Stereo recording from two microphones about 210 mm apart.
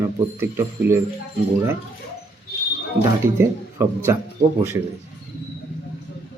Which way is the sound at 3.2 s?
10° right (ahead or behind).